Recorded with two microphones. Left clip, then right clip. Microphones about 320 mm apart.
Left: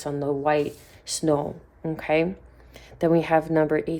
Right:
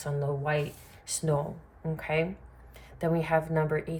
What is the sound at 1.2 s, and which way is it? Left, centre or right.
Speech, left.